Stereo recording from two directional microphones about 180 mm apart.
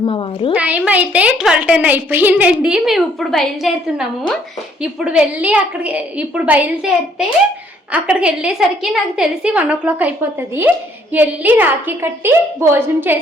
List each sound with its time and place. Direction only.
0.0 s a woman's voice: 30° left (ahead or behind)
0.5 s a woman's voice: 5° right (ahead or behind)